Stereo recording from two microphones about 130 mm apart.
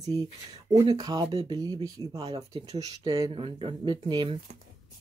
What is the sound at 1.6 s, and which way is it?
Speech, 30° right (ahead or behind).